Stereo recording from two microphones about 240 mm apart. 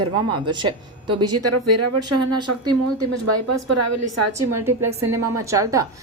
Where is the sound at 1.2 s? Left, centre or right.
Right.